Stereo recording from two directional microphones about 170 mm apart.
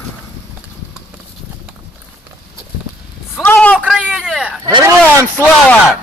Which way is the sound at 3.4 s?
10° left (ahead or behind).